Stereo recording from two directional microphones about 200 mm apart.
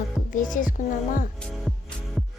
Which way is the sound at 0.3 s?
40° left (ahead or behind).